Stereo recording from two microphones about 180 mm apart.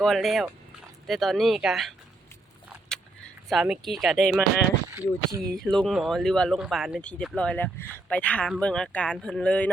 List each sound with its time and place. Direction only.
0.0 s speech: centre (ahead or behind)
3.5 s speech: centre (ahead or behind)
4.9 s speech: 15° right (ahead or behind)
5.5 s speech: 5° left (ahead or behind)